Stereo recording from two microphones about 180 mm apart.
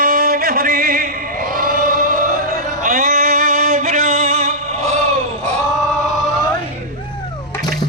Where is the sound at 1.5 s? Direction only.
50° right (ahead or behind).